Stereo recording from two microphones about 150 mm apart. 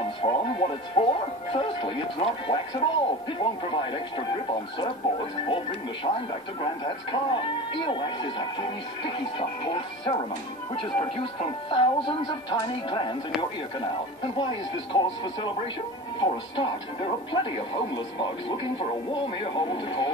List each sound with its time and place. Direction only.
0.0 s speech: 35° left (ahead or behind)